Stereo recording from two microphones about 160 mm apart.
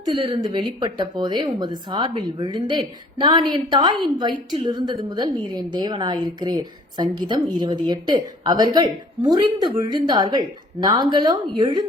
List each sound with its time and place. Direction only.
0.2 s speech: 30° right (ahead or behind)